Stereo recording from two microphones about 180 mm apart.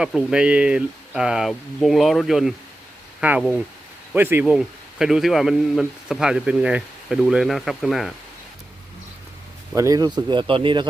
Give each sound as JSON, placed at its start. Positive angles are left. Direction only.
{"t": 0.0, "sound": "speech", "side_deg": -5}
{"t": 9.7, "sound": "speech", "side_deg": -20}